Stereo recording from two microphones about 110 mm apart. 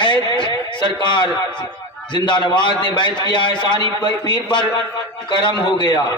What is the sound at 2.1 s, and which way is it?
A man's voice, 45° left (ahead or behind).